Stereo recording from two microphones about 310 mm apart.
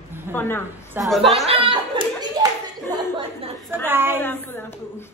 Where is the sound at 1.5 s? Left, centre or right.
Centre.